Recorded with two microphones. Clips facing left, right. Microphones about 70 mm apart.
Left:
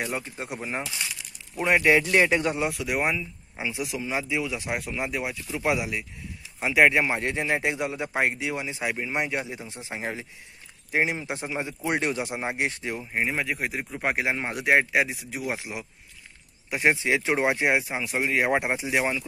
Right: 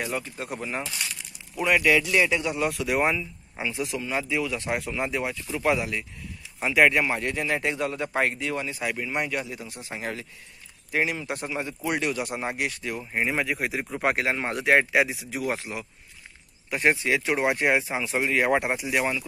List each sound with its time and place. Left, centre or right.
0.0 s speech: centre; by 2.6 s left
2.7 s speech: centre; by 13.0 s left
13.0 s speech: centre; by 17.6 s left
17.6 s speech: centre